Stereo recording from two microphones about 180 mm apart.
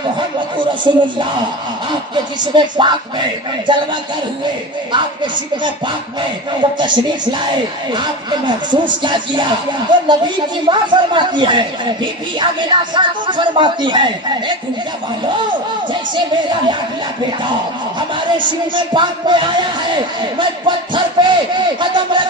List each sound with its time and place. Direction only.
0.6 s speech: 25° right (ahead or behind)
4.9 s speech: 25° right (ahead or behind)
18.9 s speech: 25° right (ahead or behind)